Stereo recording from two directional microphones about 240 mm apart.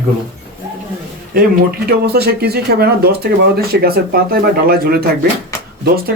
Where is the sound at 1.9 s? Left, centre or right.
Right.